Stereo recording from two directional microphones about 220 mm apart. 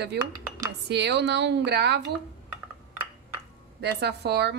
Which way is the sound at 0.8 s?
50° right (ahead or behind).